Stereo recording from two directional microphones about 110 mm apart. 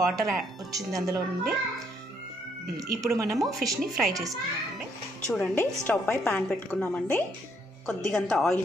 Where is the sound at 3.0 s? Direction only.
30° right (ahead or behind).